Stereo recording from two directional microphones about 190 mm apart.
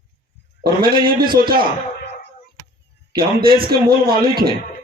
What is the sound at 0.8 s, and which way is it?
Speech, 50° right (ahead or behind).